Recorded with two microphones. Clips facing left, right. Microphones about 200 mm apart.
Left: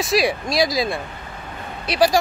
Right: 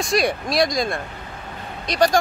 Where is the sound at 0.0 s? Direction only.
Centre (ahead or behind).